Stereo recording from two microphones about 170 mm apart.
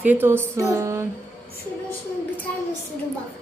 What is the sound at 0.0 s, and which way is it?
Speech, 10° right (ahead or behind).